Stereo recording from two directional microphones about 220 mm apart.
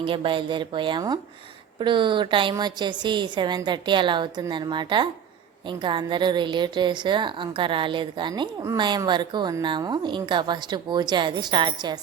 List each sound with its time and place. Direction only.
0.0 s a woman's voice: 25° right (ahead or behind)